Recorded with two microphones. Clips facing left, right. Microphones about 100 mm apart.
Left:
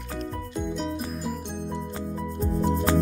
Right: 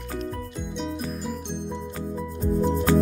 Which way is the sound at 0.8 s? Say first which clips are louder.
Even; centre (ahead or behind).